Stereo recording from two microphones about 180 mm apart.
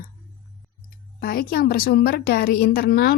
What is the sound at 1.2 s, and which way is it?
A woman's voice, 55° left (ahead or behind).